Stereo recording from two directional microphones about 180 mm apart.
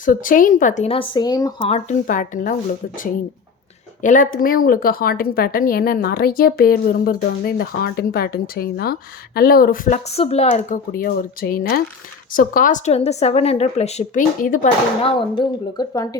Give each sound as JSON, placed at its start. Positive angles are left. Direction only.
{"t": 0.0, "sound": "speech", "side_deg": 50}
{"t": 1.6, "sound": "speech", "side_deg": 35}
{"t": 2.0, "sound": "speech", "side_deg": 45}
{"t": 4.0, "sound": "a woman's voice", "side_deg": 45}
{"t": 10.1, "sound": "speech", "side_deg": 35}
{"t": 15.0, "sound": "speech", "side_deg": 25}